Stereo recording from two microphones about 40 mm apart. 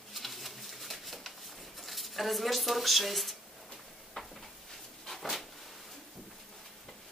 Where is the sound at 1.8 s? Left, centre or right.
Centre.